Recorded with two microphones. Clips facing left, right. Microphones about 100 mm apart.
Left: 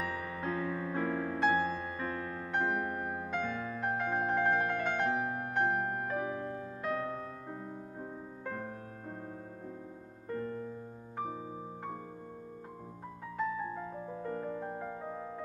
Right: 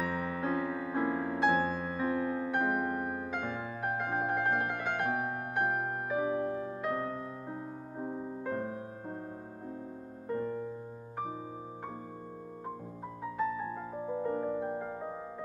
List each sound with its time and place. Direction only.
0.5 s music: 15° right (ahead or behind)
1.5 s music: 55° right (ahead or behind)
2.0 s music: 15° right (ahead or behind)
10.2 s music: 15° right (ahead or behind)
14.2 s music: 20° right (ahead or behind)